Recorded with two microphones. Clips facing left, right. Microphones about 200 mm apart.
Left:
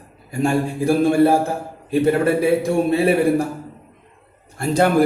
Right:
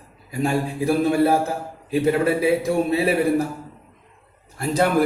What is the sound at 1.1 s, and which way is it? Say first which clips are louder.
Speech: left 4 dB; 30° left (ahead or behind).